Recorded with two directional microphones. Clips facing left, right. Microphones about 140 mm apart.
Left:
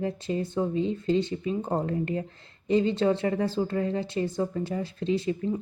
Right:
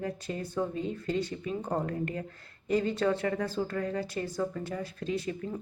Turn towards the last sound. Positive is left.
turn(degrees=25)  # may be behind; listen again after turning